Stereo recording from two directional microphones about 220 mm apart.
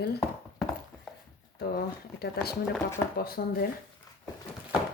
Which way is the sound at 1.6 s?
45° left (ahead or behind).